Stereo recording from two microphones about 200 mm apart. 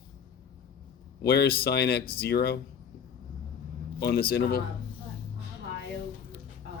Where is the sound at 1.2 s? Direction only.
55° left (ahead or behind).